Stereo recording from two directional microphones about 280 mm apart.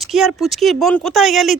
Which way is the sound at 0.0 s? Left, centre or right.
Centre.